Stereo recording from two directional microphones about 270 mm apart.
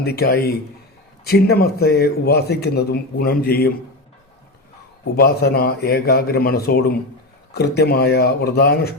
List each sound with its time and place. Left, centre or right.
0.0 s a man's voice: left
5.1 s a man's voice: left